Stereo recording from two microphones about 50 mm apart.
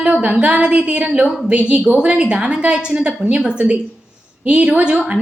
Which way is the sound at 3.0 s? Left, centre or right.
Right.